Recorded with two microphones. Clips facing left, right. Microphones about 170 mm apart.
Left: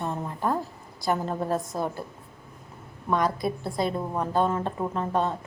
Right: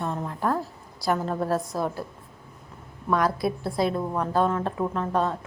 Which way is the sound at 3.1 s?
5° right (ahead or behind).